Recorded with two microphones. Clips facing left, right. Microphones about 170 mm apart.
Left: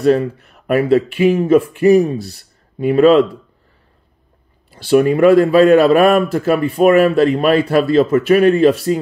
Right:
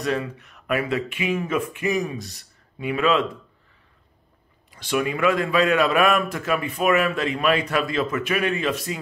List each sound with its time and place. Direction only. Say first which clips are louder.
0.6 s a sound: left 9 dB; 45° left (ahead or behind)
0.8 s a man's voice: left 13 dB; 30° left (ahead or behind)
4.9 s a man's voice: left 12 dB; 45° left (ahead or behind)
8.1 s speech: left 13 dB; 45° left (ahead or behind)